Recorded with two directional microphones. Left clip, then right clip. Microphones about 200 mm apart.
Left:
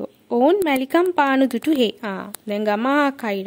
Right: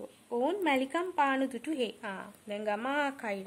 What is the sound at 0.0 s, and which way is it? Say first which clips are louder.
Speech: left 14 dB; 40° left (ahead or behind).